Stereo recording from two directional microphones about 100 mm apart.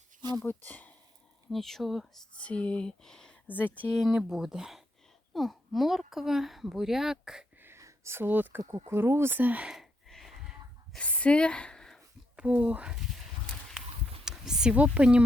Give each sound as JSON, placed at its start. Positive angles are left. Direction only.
{"t": 0.4, "sound": "speech", "side_deg": 20}
{"t": 1.5, "sound": "speech", "side_deg": 0}
{"t": 2.4, "sound": "speech", "side_deg": 10}
{"t": 3.4, "sound": "speech", "side_deg": 15}
{"t": 3.9, "sound": "speech", "side_deg": -5}
{"t": 7.6, "sound": "a sound", "side_deg": -30}
{"t": 8.7, "sound": "speech", "side_deg": -25}
{"t": 9.6, "sound": "a sound", "side_deg": 0}
{"t": 10.9, "sound": "a woman's voice", "side_deg": 10}
{"t": 12.4, "sound": "speech", "side_deg": -15}
{"t": 14.3, "sound": "speech", "side_deg": -5}